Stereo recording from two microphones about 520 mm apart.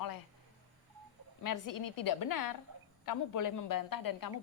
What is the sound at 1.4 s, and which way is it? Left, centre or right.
A woman's voice, left.